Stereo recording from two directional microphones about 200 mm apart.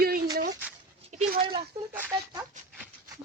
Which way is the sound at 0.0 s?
50° right (ahead or behind).